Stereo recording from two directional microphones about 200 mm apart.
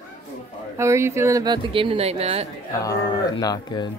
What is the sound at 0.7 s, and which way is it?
Speech, 15° right (ahead or behind).